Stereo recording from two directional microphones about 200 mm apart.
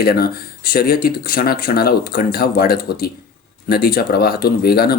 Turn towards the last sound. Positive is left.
turn(degrees=50)  # may be behind; listen again after turning